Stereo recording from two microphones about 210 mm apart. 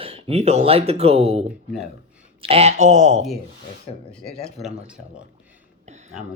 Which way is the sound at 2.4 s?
30° right (ahead or behind).